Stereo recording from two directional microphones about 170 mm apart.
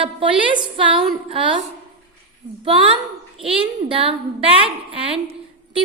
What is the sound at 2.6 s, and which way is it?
A woman's voice, 35° right (ahead or behind).